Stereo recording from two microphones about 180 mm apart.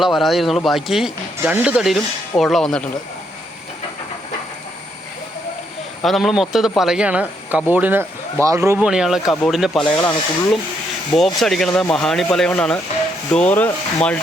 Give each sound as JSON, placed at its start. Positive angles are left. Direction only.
{"t": 0.0, "sound": "speech", "side_deg": 0}
{"t": 6.0, "sound": "a man's voice", "side_deg": 0}
{"t": 8.8, "sound": "speech", "side_deg": -5}
{"t": 11.1, "sound": "speech", "side_deg": 0}
{"t": 13.3, "sound": "sanding", "side_deg": 5}